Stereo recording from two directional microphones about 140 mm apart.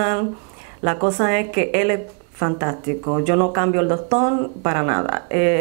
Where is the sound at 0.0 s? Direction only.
15° right (ahead or behind).